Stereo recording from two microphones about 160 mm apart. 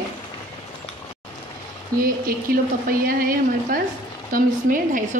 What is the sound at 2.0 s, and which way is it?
Speech, 65° right (ahead or behind).